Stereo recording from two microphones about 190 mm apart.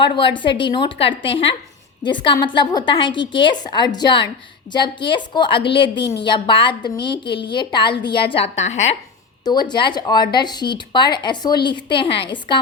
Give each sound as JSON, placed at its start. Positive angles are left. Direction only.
{"t": 0.0, "sound": "speech", "side_deg": 25}
{"t": 9.4, "sound": "speech", "side_deg": 20}